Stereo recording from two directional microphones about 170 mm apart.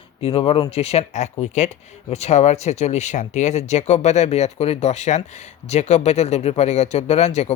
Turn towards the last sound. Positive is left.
turn(degrees=40)  # may be behind; listen again after turning